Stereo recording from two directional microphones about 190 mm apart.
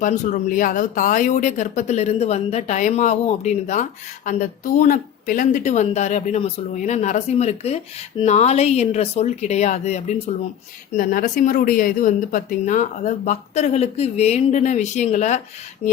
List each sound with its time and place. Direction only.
0.0 s speech: 45° left (ahead or behind)